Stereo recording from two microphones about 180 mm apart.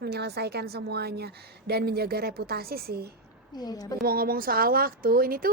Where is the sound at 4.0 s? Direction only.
55° right (ahead or behind).